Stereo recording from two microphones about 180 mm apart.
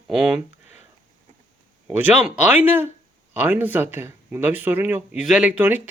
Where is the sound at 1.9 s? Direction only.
10° right (ahead or behind).